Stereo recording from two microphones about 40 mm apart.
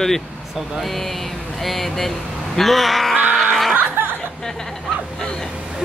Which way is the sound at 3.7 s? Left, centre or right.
Right.